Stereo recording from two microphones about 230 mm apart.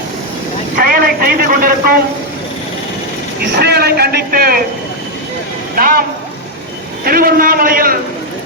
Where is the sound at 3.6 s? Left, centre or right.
Right.